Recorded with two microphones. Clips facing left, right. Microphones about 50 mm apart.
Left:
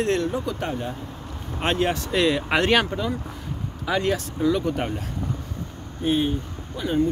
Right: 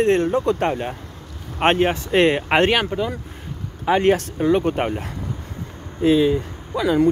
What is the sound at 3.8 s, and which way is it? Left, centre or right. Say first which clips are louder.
Speech: right 7 dB; right.